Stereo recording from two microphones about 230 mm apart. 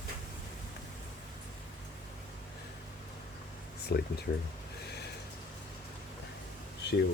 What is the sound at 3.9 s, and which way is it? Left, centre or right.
Speech, left.